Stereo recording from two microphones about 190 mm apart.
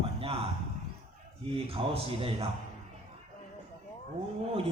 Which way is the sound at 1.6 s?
30° right (ahead or behind).